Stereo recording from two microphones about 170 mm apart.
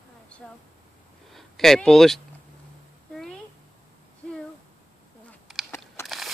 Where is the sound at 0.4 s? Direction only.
5° left (ahead or behind).